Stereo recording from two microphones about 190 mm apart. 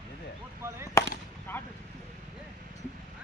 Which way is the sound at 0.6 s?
10° right (ahead or behind).